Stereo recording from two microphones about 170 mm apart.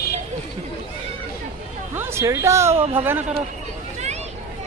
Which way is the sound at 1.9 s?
15° right (ahead or behind).